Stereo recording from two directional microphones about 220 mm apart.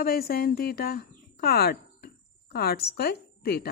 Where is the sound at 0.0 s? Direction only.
45° left (ahead or behind).